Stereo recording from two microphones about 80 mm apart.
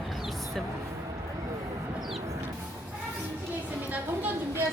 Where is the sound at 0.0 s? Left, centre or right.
Centre.